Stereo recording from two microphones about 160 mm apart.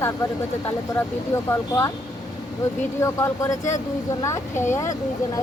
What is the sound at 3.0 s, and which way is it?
Speech, 20° left (ahead or behind).